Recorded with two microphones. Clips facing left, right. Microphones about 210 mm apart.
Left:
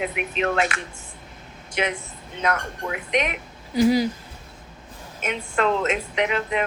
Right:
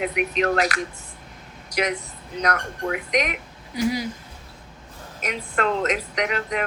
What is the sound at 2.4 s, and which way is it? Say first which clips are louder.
Speech: even; 40° right (ahead or behind).